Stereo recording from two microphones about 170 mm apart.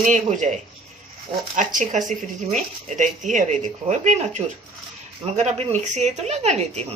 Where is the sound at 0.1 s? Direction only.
45° right (ahead or behind).